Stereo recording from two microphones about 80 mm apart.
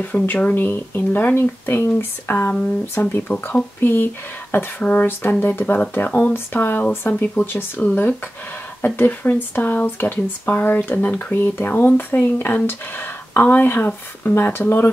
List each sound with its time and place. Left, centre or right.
0.0 s speech: left